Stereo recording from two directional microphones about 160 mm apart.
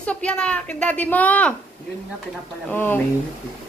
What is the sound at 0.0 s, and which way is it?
Speech, 5° left (ahead or behind).